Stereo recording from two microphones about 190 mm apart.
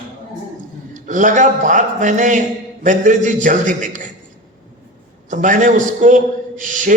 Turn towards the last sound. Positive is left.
turn(degrees=-45)  # may be behind; listen again after turning